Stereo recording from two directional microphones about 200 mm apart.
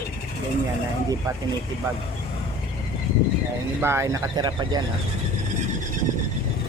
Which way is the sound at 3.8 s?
15° right (ahead or behind).